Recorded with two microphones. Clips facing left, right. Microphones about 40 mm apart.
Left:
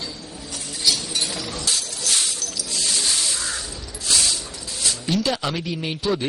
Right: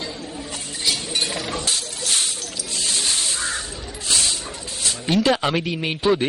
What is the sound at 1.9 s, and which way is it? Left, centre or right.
Crow, right.